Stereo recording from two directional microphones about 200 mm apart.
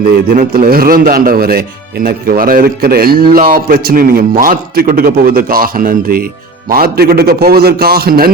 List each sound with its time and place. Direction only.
0.3 s a man's voice: 45° right (ahead or behind)